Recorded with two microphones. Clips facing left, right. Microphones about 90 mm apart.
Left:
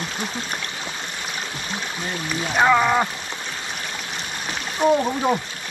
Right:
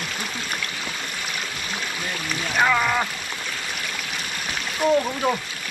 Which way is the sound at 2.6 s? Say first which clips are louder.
Left 4 dB; 15° left (ahead or behind).